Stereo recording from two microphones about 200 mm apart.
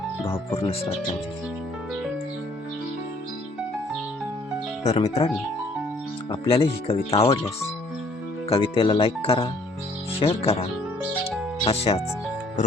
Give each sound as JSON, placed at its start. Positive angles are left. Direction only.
{"t": 0.5, "sound": "speech", "side_deg": 30}
{"t": 4.8, "sound": "speech", "side_deg": 35}
{"t": 6.4, "sound": "speech", "side_deg": 30}
{"t": 8.4, "sound": "speech", "side_deg": 25}